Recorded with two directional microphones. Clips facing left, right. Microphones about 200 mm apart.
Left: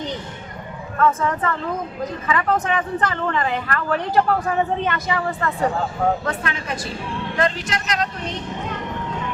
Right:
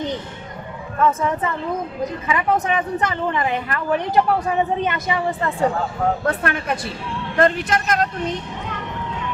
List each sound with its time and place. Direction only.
1.0 s speech: 15° right (ahead or behind)
6.2 s speech: 55° right (ahead or behind)